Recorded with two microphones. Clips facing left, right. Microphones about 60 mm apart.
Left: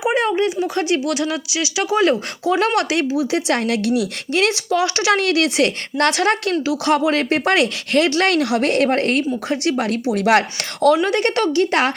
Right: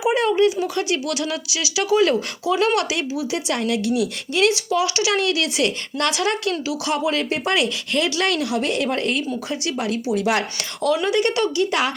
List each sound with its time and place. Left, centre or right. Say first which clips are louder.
0.0 s speech: even; left
2.7 s speech: left 4 dB; left
4.4 s speech: left 1 dB; left
11.1 s speech: left 2 dB; left